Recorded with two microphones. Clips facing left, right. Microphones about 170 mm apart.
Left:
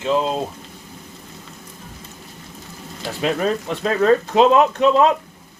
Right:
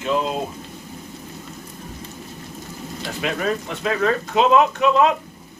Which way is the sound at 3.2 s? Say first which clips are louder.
Left 4 dB; 35° left (ahead or behind).